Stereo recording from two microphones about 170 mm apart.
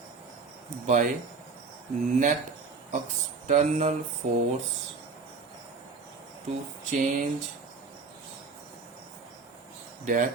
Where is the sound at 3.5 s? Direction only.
40° right (ahead or behind).